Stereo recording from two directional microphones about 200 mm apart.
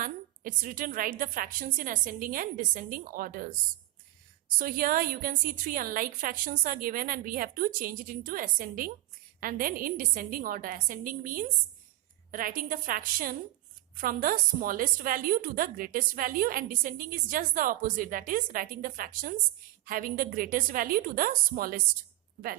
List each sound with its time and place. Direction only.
0.0 s a woman's voice: 45° right (ahead or behind)
4.5 s a woman's voice: 45° right (ahead or behind)